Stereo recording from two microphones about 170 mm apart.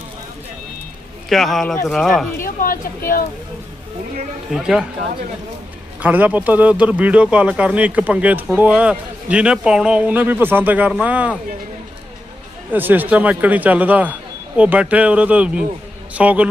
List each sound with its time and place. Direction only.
1.3 s a man's voice: centre (ahead or behind)
2.4 s a woman's voice: 55° left (ahead or behind)
4.5 s a man's voice: 5° right (ahead or behind)
6.0 s a man's voice: 10° right (ahead or behind)
12.7 s a man's voice: 10° right (ahead or behind)